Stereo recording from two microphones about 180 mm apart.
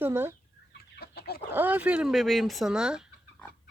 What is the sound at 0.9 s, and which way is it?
Chicken, 60° left (ahead or behind).